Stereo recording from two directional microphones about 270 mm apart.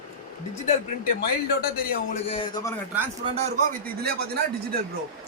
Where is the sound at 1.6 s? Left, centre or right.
Left.